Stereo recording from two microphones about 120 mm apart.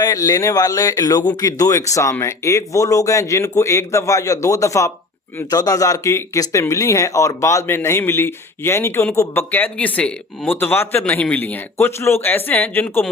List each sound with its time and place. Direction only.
0.0 s a man's voice: 30° left (ahead or behind)